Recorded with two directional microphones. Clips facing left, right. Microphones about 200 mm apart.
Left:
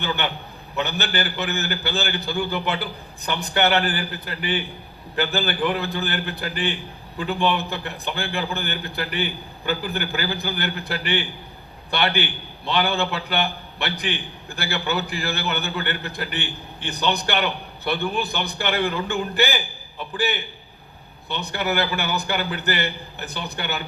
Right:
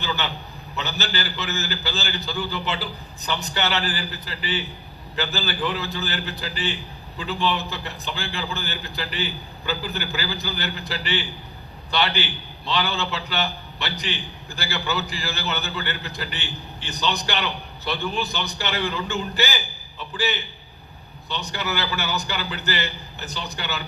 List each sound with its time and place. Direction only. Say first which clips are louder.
0.0 s a man's voice: left 2 dB; 55° left (ahead or behind)